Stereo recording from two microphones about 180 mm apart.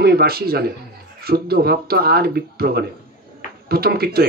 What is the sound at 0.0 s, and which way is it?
A man's voice, 60° right (ahead or behind).